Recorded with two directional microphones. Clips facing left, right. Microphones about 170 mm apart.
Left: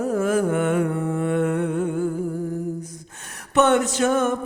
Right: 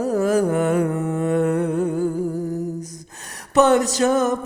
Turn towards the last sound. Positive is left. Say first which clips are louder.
# right 2 dB
turn(degrees=-35)  # may be behind; listen again after turning